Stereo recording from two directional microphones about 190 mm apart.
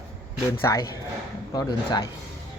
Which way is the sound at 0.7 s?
15° left (ahead or behind).